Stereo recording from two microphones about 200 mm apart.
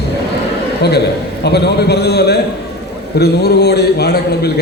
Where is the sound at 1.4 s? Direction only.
55° left (ahead or behind).